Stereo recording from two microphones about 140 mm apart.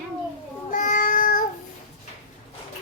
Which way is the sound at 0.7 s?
65° left (ahead or behind).